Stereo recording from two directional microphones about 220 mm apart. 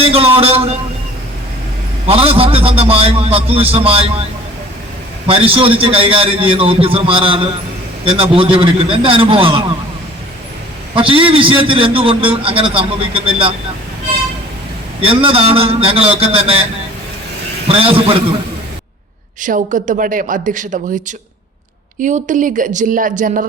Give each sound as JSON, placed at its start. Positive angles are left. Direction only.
{"t": 0.0, "sound": "a man's voice", "side_deg": -25}
{"t": 2.0, "sound": "a man's voice", "side_deg": -25}
{"t": 5.3, "sound": "a man's voice", "side_deg": -25}
{"t": 10.9, "sound": "a man's voice", "side_deg": -25}
{"t": 15.0, "sound": "a man's voice", "side_deg": -25}
{"t": 17.7, "sound": "a man's voice", "side_deg": -25}
{"t": 19.4, "sound": "speech", "side_deg": -35}
{"t": 22.0, "sound": "speech", "side_deg": -35}